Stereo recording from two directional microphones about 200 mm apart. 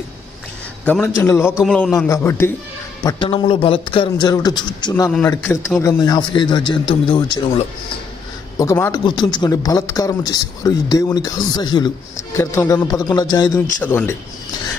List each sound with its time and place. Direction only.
0.8 s a man's voice: 10° left (ahead or behind)
1.6 s a man's voice: centre (ahead or behind)